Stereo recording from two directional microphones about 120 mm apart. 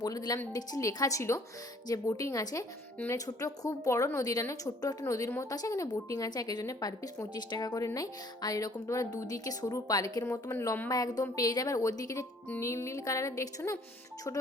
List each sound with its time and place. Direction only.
0.0 s a woman's voice: 35° left (ahead or behind)